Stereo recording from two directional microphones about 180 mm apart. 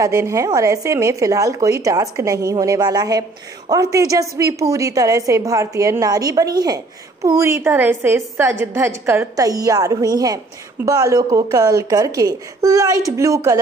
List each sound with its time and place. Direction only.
0.0 s a woman's voice: 15° right (ahead or behind)